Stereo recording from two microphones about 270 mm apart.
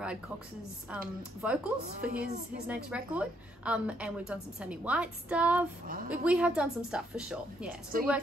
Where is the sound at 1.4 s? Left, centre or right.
Centre.